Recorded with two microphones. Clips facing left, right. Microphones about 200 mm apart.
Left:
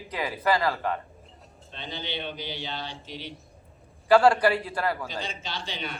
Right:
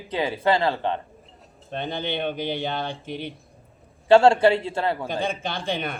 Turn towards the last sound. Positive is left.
turn(degrees=-55)  # may be behind; listen again after turning